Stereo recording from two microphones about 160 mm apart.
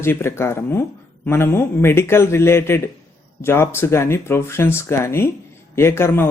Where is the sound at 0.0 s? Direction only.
15° left (ahead or behind).